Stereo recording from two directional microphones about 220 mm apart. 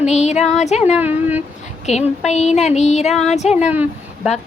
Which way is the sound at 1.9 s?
30° left (ahead or behind).